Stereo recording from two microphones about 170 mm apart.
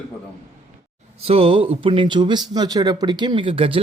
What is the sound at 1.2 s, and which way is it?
Speech, 35° right (ahead or behind).